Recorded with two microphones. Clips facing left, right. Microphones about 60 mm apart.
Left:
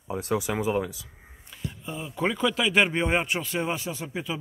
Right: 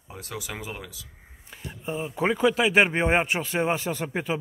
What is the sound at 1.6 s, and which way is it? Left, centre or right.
Speech, right.